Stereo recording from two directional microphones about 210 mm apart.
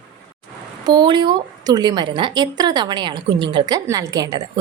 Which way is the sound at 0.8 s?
20° right (ahead or behind).